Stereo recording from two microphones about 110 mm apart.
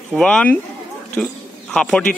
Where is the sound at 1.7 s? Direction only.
5° left (ahead or behind).